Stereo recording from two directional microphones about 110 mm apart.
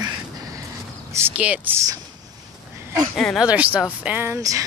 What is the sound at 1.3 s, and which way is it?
Speech, 15° right (ahead or behind).